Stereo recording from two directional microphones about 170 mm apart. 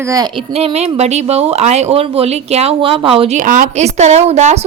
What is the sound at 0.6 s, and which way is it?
Speech, 35° right (ahead or behind).